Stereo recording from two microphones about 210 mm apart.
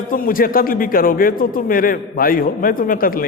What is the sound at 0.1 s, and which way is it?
A man's voice, 40° left (ahead or behind).